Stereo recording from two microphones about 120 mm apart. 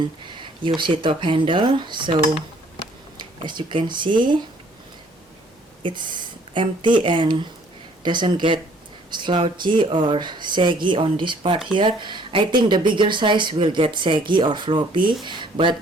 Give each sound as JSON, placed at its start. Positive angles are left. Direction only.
{"t": 0.3, "sound": "a sound", "side_deg": -40}
{"t": 0.8, "sound": "speech", "side_deg": -40}
{"t": 3.2, "sound": "speech", "side_deg": -40}
{"t": 5.8, "sound": "speech", "side_deg": -40}